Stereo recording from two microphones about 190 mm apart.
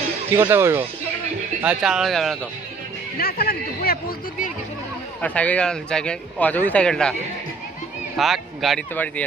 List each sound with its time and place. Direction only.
0.3 s speech: 10° right (ahead or behind)
3.2 s a man's voice: 55° left (ahead or behind)
5.2 s speech: 5° left (ahead or behind)